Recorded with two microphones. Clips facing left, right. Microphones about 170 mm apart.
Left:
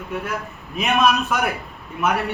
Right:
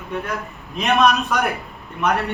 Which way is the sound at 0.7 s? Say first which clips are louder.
Right 2 dB; centre (ahead or behind).